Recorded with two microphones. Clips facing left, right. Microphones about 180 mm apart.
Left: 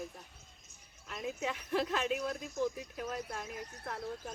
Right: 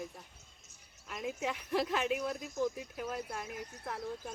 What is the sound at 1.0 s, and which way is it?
Speech, 10° right (ahead or behind).